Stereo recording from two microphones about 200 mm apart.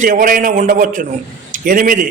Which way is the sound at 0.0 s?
40° right (ahead or behind).